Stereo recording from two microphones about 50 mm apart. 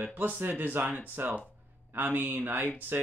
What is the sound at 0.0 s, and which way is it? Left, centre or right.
Speech, right.